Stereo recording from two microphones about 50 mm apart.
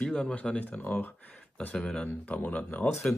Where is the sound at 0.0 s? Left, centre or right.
Centre.